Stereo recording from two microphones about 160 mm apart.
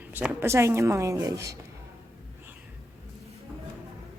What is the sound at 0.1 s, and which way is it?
A woman's voice, 15° right (ahead or behind).